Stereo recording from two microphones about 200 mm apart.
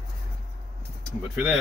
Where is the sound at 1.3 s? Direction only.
5° right (ahead or behind).